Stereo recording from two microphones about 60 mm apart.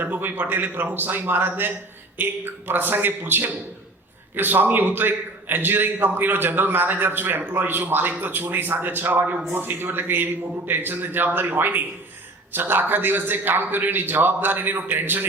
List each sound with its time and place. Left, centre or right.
0.0 s a man's voice: right